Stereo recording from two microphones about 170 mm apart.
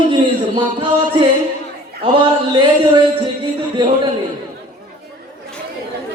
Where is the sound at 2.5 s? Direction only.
25° right (ahead or behind).